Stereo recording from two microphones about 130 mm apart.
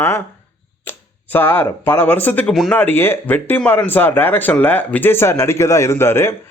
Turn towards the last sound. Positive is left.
turn(degrees=20)  # may be behind; listen again after turning